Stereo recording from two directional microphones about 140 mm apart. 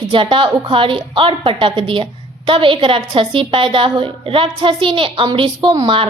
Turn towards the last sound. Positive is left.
turn(degrees=-35)  # may be behind; listen again after turning